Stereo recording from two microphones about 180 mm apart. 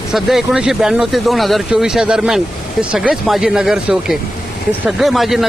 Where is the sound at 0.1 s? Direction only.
Centre (ahead or behind).